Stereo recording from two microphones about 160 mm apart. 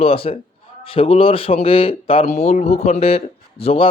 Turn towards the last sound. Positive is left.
turn(degrees=40)  # may be behind; listen again after turning